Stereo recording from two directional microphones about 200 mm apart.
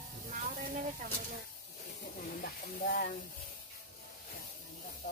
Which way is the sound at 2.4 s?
45° left (ahead or behind).